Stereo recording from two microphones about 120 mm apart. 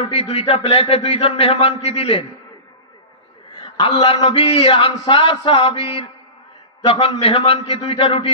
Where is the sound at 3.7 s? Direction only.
45° left (ahead or behind).